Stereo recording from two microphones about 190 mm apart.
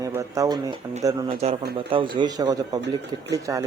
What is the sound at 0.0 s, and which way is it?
A man's voice, 15° right (ahead or behind).